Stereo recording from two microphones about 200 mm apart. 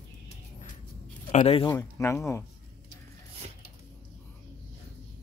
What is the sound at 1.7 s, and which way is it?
Speech, 15° left (ahead or behind).